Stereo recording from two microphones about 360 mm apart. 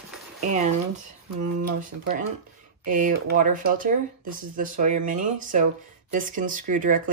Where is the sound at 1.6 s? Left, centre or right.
Right.